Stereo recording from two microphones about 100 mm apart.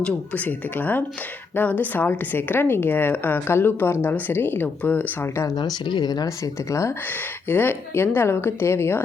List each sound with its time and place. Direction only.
0.0 s speech: 15° left (ahead or behind)
5.5 s speech: 45° left (ahead or behind); by 6.9 s 30° left (ahead or behind)
7.4 s speech: 20° left (ahead or behind)